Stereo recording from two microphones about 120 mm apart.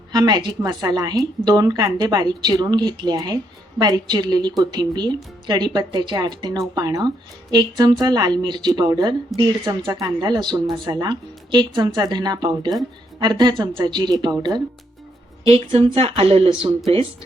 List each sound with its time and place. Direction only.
0.1 s speech: 35° right (ahead or behind)
15.4 s speech: 50° right (ahead or behind)